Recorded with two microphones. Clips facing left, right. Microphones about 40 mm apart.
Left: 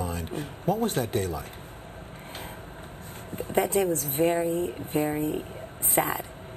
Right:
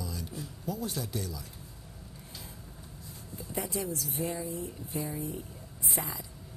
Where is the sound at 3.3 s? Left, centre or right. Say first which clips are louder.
Left 11 dB; left.